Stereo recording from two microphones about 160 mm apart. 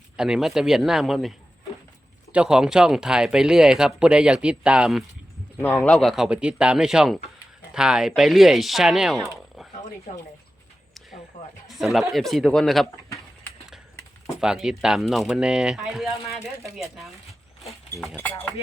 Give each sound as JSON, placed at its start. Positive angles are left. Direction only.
{"t": 0.2, "sound": "speech", "side_deg": 0}
{"t": 2.3, "sound": "speech", "side_deg": -5}
{"t": 5.6, "sound": "speech", "side_deg": 10}
{"t": 10.1, "sound": "speech", "side_deg": 50}
{"t": 11.3, "sound": "a sound", "side_deg": 45}
{"t": 11.7, "sound": "speech", "side_deg": 0}
{"t": 14.4, "sound": "speech", "side_deg": -5}